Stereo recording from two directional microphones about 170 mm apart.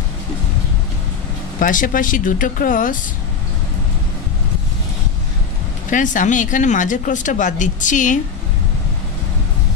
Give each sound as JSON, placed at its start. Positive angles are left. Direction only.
{"t": 1.6, "sound": "speech", "side_deg": 55}
{"t": 5.9, "sound": "speech", "side_deg": 50}